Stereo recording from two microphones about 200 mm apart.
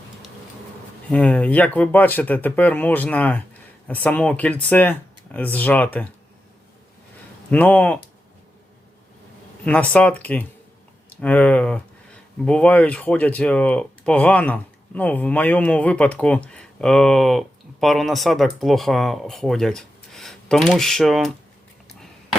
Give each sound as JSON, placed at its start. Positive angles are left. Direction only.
{"t": 1.1, "sound": "speech", "side_deg": 5}
{"t": 7.5, "sound": "speech", "side_deg": 5}
{"t": 9.6, "sound": "speech", "side_deg": 5}